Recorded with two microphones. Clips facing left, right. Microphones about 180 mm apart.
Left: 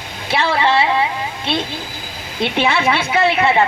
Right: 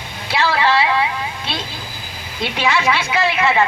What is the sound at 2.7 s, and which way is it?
Speech, 55° left (ahead or behind).